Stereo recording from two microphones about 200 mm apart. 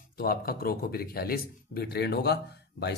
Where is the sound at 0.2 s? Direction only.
50° left (ahead or behind).